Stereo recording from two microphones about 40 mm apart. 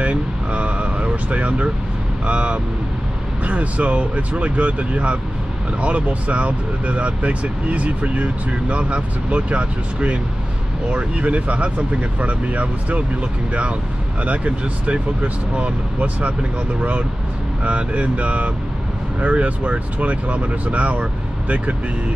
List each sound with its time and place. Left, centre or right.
0.0 s a sound: right
2.2 s speech: right
17.6 s speech: right